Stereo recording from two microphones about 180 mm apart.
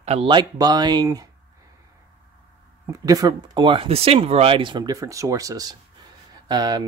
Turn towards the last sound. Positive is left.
turn(degrees=-20)  # may be behind; listen again after turning